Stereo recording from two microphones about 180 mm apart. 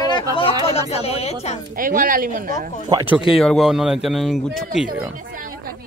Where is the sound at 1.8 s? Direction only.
50° right (ahead or behind).